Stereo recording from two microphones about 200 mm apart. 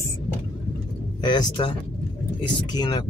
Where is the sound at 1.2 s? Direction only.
20° left (ahead or behind).